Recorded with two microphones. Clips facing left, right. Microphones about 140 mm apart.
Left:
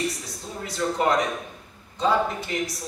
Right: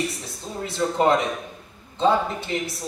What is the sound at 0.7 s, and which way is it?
A man's voice, 25° right (ahead or behind).